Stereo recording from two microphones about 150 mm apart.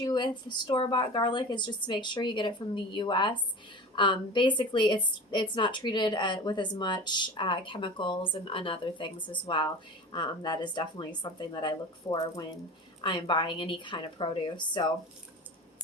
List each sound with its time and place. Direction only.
0.0 s a woman's voice: 30° left (ahead or behind)